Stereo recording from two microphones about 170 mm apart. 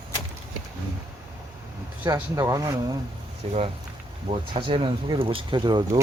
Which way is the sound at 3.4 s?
35° right (ahead or behind).